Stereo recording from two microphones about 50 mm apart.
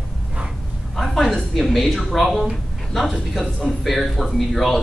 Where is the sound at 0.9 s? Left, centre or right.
Centre.